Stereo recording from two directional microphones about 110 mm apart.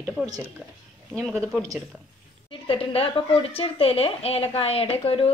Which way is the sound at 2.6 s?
60° left (ahead or behind).